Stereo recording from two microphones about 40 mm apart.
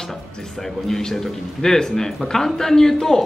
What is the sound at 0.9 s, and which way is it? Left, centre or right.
Speech, centre.